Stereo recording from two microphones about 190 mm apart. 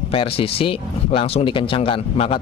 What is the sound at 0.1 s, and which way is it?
Speech, 30° left (ahead or behind).